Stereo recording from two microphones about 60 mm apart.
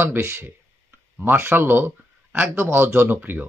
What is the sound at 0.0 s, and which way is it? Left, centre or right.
Speech, right.